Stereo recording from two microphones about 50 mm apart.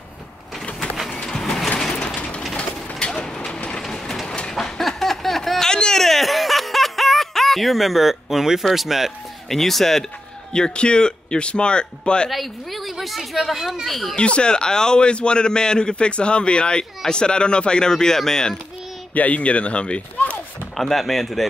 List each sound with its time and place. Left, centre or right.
1.2 s a sound: centre
2.5 s bird: centre
3.2 s mechanisms: centre
3.8 s train: centre
4.6 s a sound: centre
9.6 s a woman's voice: centre
10.5 s speech: centre
12.3 s a woman's voice: centre
14.1 s a man's voice: left
19.1 s speech: left
20.7 s a woman's voice: centre